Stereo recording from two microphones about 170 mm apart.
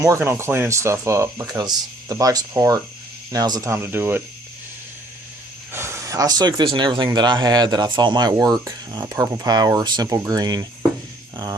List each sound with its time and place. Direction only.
0.0 s speech: 15° right (ahead or behind)
5.7 s speech: 15° right (ahead or behind)